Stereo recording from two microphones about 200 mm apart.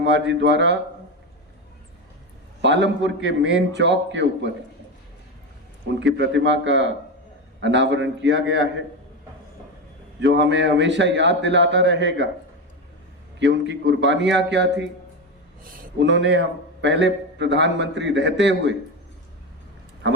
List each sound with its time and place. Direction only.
0.0 s a man's voice: 65° right (ahead or behind)
2.6 s a man's voice: 65° right (ahead or behind)
6.1 s a man's voice: 65° right (ahead or behind)
10.2 s a man's voice: 65° right (ahead or behind)
13.4 s a man's voice: 65° right (ahead or behind)
15.6 s a sound: 45° right (ahead or behind)
16.0 s a man's voice: 65° right (ahead or behind)